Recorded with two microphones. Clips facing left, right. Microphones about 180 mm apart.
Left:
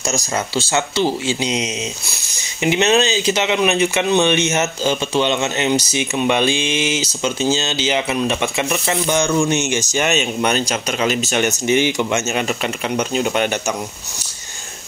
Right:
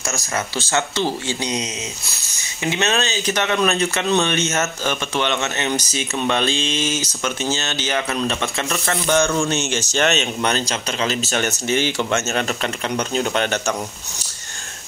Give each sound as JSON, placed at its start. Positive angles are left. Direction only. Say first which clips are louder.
{"t": 0.0, "sound": "speech", "louder": "left 4 dB", "side_deg": 15}
{"t": 2.6, "sound": "speech", "louder": "left 6 dB", "side_deg": 20}